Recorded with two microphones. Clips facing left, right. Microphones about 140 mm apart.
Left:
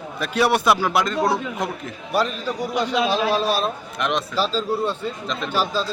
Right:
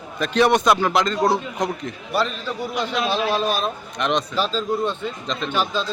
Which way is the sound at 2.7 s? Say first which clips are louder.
Left 2 dB; 40° left (ahead or behind).